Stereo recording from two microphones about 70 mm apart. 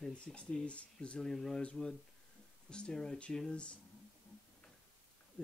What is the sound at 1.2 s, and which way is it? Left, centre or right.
Speech, centre.